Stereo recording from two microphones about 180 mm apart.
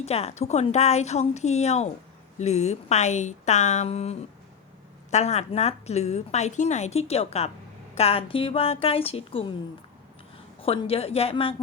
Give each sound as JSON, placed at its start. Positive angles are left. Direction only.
{"t": 0.0, "sound": "a woman's voice", "side_deg": 35}
{"t": 10.6, "sound": "a woman's voice", "side_deg": 30}